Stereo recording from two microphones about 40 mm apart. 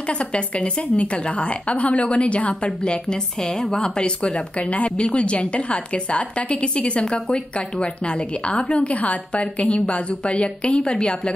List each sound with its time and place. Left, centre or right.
0.1 s speech: left